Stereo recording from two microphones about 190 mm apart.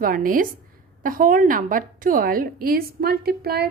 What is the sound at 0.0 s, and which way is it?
A woman's voice, 45° right (ahead or behind).